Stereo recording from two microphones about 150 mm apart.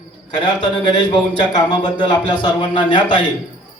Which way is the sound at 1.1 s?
30° left (ahead or behind).